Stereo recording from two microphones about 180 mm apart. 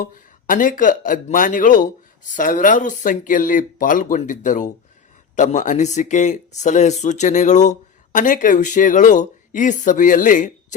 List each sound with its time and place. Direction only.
0.0 s speech: 50° left (ahead or behind)